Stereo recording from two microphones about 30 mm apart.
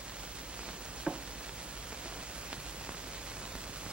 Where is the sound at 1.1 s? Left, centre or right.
Right.